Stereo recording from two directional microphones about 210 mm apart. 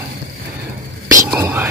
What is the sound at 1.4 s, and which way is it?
Whispering, 10° right (ahead or behind).